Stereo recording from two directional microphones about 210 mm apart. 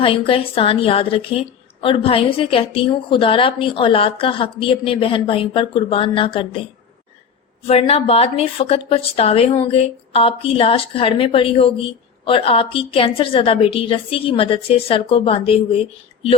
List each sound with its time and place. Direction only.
0.0 s a woman's voice: 25° left (ahead or behind)
7.7 s a woman's voice: 30° left (ahead or behind)